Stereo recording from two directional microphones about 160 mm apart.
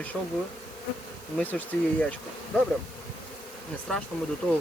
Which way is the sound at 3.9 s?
5° left (ahead or behind).